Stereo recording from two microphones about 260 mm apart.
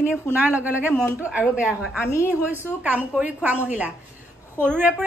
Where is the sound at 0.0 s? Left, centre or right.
Centre.